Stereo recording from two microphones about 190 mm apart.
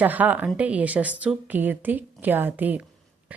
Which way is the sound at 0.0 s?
10° right (ahead or behind).